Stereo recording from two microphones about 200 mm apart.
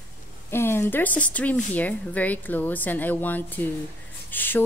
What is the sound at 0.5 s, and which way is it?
A woman's voice, 10° left (ahead or behind).